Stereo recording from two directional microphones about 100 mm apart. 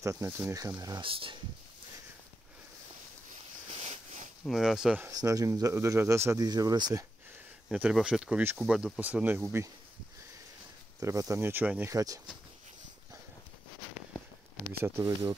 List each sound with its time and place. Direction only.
0.0 s speech: 30° right (ahead or behind)
0.7 s speech: 40° right (ahead or behind)
1.0 s speech: 60° right (ahead or behind)
3.7 s a sound: 90° right
4.5 s speech: 5° right (ahead or behind)
5.1 s speech: 35° right (ahead or behind)
7.7 s speech: 5° right (ahead or behind)
11.0 s speech: 30° right (ahead or behind); by 11.9 s 15° right (ahead or behind)
11.9 s speech: 35° right (ahead or behind)
14.8 s speech: 25° right (ahead or behind)